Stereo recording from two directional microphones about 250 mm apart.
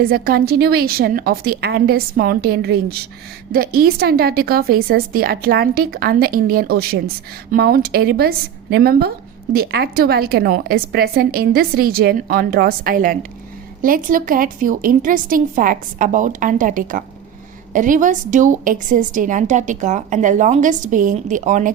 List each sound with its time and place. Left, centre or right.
0.0 s a woman's voice: right